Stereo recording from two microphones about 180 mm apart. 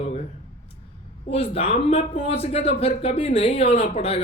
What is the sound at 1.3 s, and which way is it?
A man's voice, 35° left (ahead or behind).